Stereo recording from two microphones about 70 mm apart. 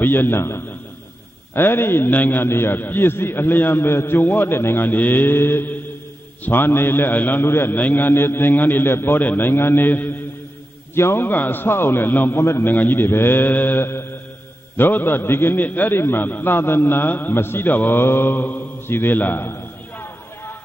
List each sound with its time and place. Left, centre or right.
0.0 s a man's voice: left